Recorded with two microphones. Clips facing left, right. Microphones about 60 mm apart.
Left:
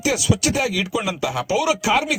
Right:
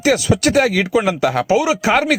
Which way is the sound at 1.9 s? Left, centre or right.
Right.